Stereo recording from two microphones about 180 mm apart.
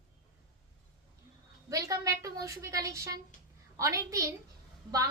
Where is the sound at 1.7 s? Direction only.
20° right (ahead or behind).